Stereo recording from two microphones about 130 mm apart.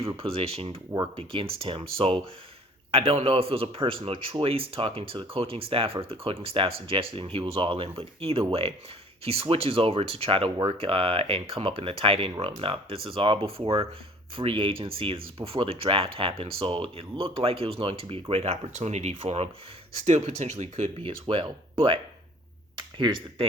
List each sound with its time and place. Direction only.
0.2 s a man's voice: 50° right (ahead or behind)
21.2 s speech: 40° right (ahead or behind)